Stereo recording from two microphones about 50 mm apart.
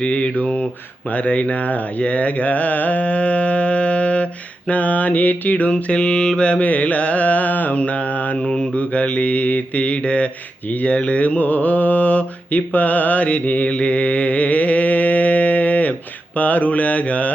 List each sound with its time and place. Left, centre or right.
0.0 s speech: left
4.7 s mantra: left
8.4 s speech: left
10.7 s mantra: left